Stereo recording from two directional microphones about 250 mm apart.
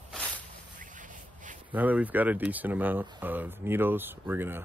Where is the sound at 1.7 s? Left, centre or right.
Centre.